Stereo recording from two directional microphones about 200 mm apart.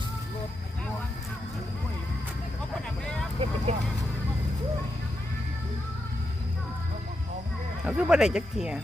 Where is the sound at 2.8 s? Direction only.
5° left (ahead or behind).